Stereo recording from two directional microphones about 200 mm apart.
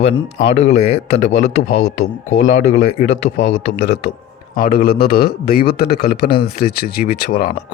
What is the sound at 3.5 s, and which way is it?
A man's voice, 55° left (ahead or behind).